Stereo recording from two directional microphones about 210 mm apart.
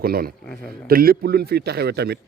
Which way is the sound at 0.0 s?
45° right (ahead or behind).